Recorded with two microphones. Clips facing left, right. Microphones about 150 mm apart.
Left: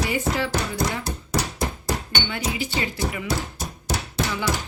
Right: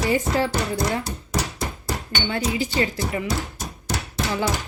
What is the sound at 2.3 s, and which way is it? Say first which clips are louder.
Speech: right 5 dB; 35° right (ahead or behind).